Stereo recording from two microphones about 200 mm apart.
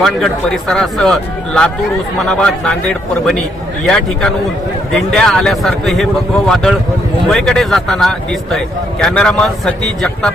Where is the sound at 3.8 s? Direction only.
5° left (ahead or behind).